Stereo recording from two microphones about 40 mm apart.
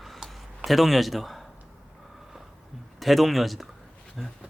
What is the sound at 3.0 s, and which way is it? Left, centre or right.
Speech, centre.